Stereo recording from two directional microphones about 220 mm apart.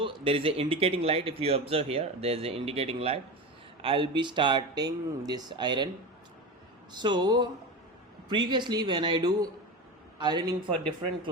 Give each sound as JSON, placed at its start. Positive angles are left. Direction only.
{"t": 0.0, "sound": "speech", "side_deg": -25}
{"t": 6.9, "sound": "speech", "side_deg": -20}